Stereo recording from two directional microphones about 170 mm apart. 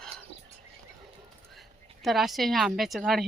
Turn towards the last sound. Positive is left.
turn(degrees=0)  # may be behind; listen again after turning